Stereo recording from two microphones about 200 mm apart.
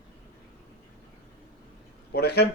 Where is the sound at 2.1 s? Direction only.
55° left (ahead or behind).